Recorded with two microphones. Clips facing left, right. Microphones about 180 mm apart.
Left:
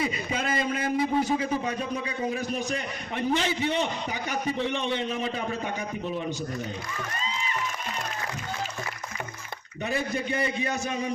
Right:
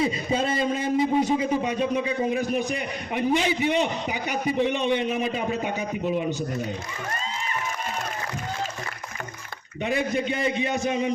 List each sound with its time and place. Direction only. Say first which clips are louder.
0.0 s a sound: right 5 dB; 30° right (ahead or behind)
1.1 s a man's voice: right 3 dB; 20° right (ahead or behind)
9.8 s a man's voice: right 4 dB; 20° right (ahead or behind)